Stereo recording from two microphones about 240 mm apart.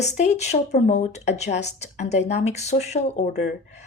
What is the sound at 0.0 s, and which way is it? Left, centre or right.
Speech, left.